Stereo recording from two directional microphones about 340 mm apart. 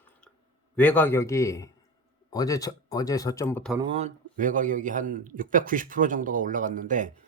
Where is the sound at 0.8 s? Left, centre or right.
Centre.